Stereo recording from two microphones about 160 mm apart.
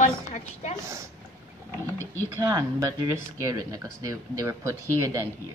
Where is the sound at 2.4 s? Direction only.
20° right (ahead or behind).